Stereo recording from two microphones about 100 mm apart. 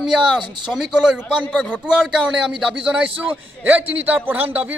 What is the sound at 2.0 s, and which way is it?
A man's voice, 5° right (ahead or behind).